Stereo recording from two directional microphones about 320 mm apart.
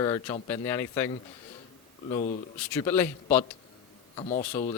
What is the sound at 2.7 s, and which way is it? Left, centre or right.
Speech, centre.